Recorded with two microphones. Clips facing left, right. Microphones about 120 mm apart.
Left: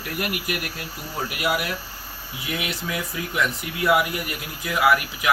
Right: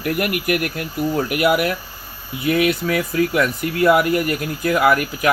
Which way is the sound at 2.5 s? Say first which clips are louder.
Right 12 dB; 60° right (ahead or behind).